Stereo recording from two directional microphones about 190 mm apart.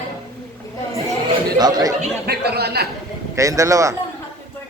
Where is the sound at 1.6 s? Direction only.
20° right (ahead or behind).